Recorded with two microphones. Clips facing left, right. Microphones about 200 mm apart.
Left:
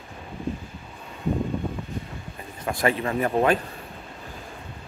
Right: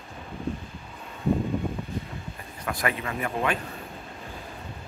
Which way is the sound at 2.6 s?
25° left (ahead or behind).